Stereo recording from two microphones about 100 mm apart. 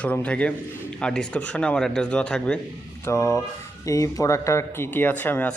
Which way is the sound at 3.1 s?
30° left (ahead or behind).